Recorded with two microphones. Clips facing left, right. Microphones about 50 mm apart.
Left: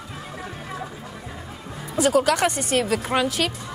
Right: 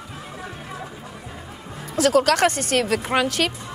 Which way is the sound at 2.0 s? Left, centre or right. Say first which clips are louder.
Right 2 dB; right.